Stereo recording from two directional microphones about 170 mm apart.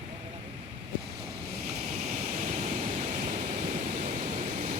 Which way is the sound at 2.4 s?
45° right (ahead or behind).